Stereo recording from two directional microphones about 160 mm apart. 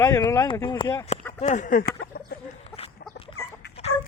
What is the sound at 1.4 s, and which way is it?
Speech, 50° left (ahead or behind).